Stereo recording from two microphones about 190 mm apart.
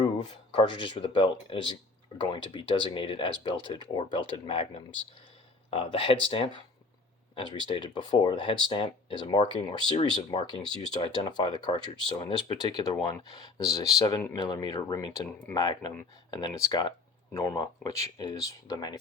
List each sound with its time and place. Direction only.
0.0 s speech: 25° left (ahead or behind)